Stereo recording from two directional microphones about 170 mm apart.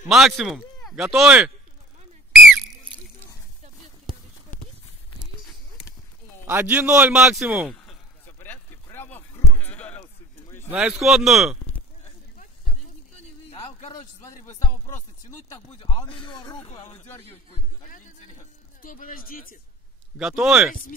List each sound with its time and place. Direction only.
0.1 s speech: centre (ahead or behind)
4.0 s a sound: 30° right (ahead or behind)
6.4 s a man's voice: 10° right (ahead or behind)
7.7 s a sound: 5° left (ahead or behind)
9.5 s sheep: 10° left (ahead or behind)
10.7 s speech: 5° right (ahead or behind)
13.5 s a sound: 40° left (ahead or behind)
15.8 s a man's voice: 25° left (ahead or behind)
16.8 s speech: 40° left (ahead or behind)
18.8 s speech: 55° left (ahead or behind)
20.2 s speech: 5° right (ahead or behind)